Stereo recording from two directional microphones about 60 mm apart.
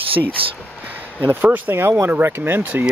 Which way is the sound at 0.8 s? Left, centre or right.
Right.